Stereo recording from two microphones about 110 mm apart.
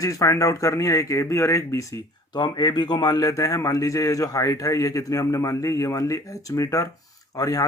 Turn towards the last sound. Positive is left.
turn(degrees=30)  # may be behind; listen again after turning